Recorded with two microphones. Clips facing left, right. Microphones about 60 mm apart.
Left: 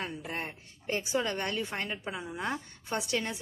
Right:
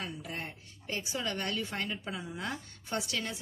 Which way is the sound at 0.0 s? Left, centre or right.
Left.